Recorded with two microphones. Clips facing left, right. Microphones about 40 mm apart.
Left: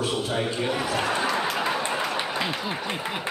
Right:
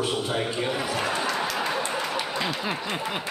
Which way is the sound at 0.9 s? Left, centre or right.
Centre.